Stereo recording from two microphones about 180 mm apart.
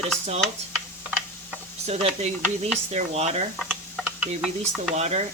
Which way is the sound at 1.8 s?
35° right (ahead or behind).